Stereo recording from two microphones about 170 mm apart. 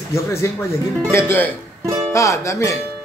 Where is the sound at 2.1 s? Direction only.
15° left (ahead or behind).